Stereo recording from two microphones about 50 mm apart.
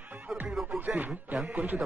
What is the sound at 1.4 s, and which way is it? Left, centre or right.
Speech, right.